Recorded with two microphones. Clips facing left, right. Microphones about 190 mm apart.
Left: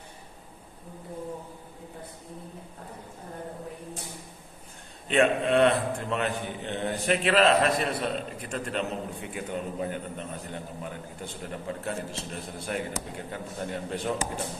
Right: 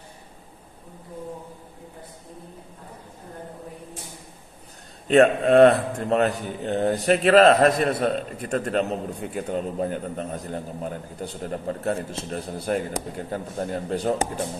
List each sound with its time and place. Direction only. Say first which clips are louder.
5.0 s a man's voice: right 7 dB; 40° right (ahead or behind)